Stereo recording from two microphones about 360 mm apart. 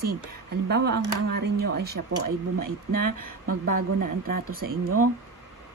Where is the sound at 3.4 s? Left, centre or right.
Right.